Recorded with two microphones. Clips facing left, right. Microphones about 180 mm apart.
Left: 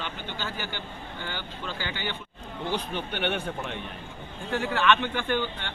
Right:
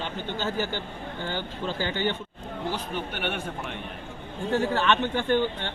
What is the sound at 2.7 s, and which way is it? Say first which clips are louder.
Speech: left 1 dB; 5° right (ahead or behind).